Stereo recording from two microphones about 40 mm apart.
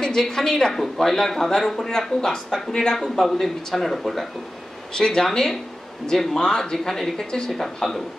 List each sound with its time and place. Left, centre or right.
0.0 s speech: centre
3.2 s speech: centre